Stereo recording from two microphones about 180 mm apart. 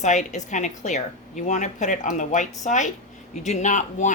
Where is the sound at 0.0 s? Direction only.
40° left (ahead or behind).